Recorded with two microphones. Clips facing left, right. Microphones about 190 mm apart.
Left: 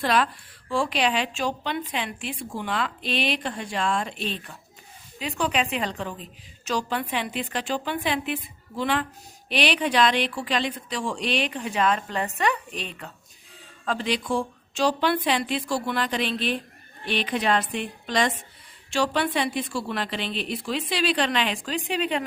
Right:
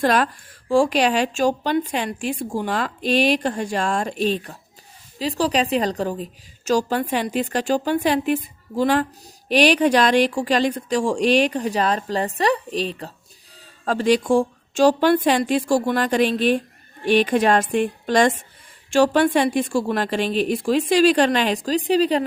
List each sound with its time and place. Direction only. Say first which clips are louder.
0.0 s a woman's voice: right 4 dB; 45° right (ahead or behind)
13.8 s a woman's voice: right 9 dB; 45° right (ahead or behind)